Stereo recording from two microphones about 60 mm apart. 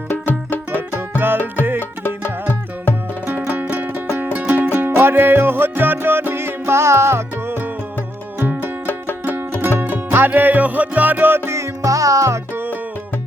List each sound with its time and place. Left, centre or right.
0.1 s music: left
2.0 s music: left
3.2 s music: right
8.9 s music: left
9.6 s music: right